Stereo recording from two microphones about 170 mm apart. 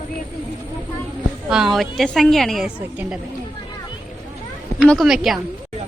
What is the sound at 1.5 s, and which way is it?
A woman's voice, 5° right (ahead or behind).